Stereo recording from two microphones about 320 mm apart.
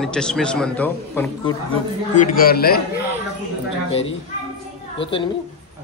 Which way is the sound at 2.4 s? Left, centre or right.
Left.